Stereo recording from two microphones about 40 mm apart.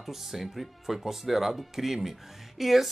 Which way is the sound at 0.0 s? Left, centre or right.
Centre.